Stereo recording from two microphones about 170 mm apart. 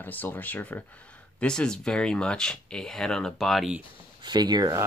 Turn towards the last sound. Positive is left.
turn(degrees=-25)  # may be behind; listen again after turning